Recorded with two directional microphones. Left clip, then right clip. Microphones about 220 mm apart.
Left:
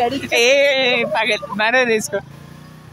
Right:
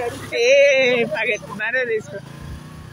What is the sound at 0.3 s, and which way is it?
Speech, 30° left (ahead or behind).